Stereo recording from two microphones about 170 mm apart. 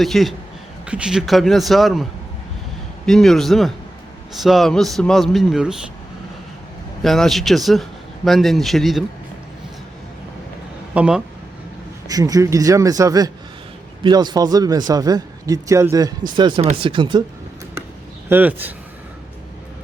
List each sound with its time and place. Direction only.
0.0 s a man's voice: centre (ahead or behind)
3.1 s a man's voice: centre (ahead or behind)
7.0 s a man's voice: centre (ahead or behind)
10.9 s speech: 5° right (ahead or behind)
12.0 s a man's voice: 20° right (ahead or behind)
18.3 s speech: 10° right (ahead or behind)